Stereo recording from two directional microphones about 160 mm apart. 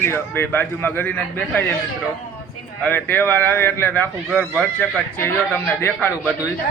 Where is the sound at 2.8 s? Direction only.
10° left (ahead or behind).